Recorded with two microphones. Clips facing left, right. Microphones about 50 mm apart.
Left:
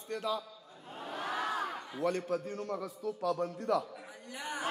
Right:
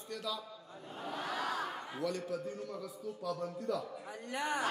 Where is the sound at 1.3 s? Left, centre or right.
Left.